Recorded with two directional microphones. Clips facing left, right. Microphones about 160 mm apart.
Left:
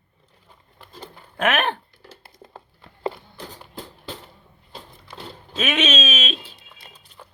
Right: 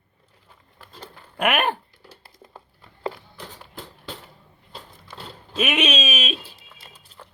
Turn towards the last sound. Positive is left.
turn(degrees=10)  # may be behind; listen again after turning